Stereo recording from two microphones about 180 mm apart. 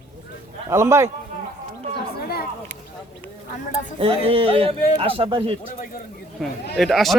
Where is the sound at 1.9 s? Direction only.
60° left (ahead or behind).